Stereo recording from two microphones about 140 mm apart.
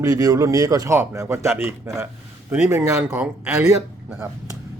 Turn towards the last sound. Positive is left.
turn(degrees=-15)  # may be behind; listen again after turning